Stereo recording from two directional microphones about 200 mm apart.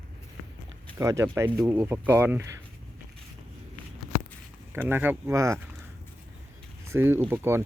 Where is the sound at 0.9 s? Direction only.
15° right (ahead or behind).